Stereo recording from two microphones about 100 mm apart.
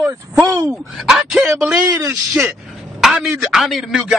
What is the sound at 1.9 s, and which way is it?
Speech, 30° right (ahead or behind).